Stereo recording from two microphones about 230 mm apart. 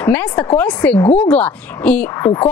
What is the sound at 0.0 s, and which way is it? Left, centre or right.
A woman's voice, centre.